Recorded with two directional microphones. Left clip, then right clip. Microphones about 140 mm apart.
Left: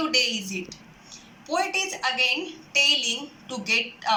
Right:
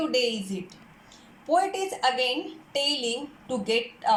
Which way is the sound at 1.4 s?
40° right (ahead or behind).